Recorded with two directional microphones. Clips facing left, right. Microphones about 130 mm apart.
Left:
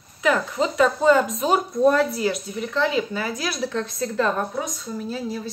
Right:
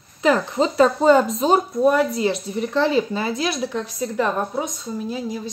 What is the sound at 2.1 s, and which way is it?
Speech, 25° right (ahead or behind).